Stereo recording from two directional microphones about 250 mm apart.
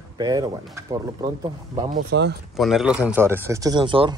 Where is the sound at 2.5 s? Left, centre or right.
Centre.